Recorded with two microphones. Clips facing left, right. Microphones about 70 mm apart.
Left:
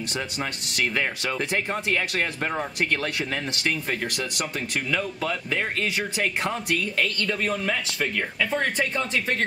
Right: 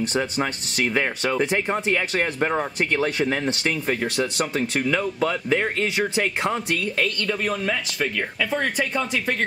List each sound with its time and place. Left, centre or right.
0.2 s speech: centre
7.0 s speech: centre